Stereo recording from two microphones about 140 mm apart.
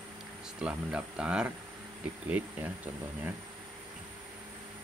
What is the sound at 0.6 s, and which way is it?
Speech, 5° right (ahead or behind).